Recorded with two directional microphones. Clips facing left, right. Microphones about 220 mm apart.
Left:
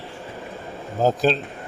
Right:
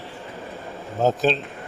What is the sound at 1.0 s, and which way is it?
Speech, centre (ahead or behind).